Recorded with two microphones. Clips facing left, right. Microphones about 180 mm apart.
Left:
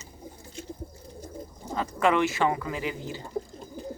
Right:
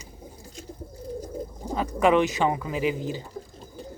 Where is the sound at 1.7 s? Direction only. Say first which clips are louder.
Right 3 dB; 15° right (ahead or behind).